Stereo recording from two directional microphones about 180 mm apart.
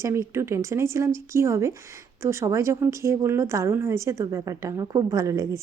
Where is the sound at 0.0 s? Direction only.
15° right (ahead or behind).